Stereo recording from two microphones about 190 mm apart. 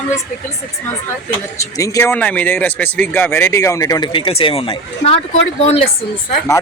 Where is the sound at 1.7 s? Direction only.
15° left (ahead or behind); by 5.7 s 35° left (ahead or behind).